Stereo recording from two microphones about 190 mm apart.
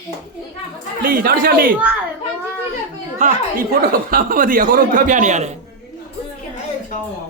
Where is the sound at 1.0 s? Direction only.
50° right (ahead or behind).